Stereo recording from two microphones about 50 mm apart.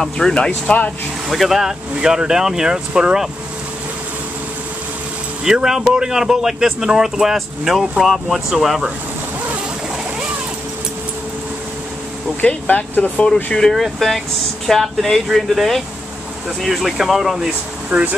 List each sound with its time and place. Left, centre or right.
0.0 s speech: centre
1.3 s speech: centre
5.4 s speech: centre
12.4 s speech: left
13.2 s speech: centre
17.8 s speech: right